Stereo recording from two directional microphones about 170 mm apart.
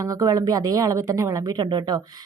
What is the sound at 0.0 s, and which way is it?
A woman's voice, 20° right (ahead or behind).